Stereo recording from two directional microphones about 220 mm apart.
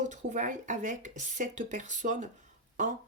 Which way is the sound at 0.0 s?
35° right (ahead or behind).